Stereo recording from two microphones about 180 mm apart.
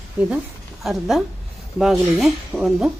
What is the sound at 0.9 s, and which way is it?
Speech, centre (ahead or behind).